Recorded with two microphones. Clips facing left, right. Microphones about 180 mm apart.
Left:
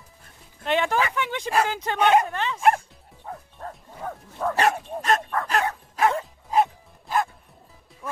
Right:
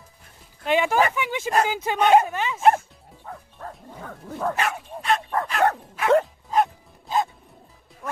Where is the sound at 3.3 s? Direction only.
30° left (ahead or behind).